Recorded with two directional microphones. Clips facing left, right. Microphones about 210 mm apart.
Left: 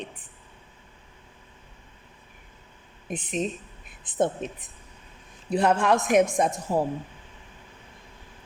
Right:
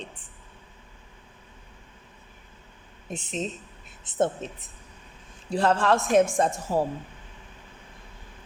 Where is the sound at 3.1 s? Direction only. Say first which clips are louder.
Left 3 dB; 25° right (ahead or behind).